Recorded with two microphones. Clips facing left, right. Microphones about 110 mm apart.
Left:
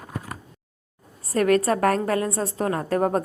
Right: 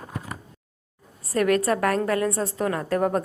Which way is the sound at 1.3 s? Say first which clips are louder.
Left 1 dB; 35° left (ahead or behind).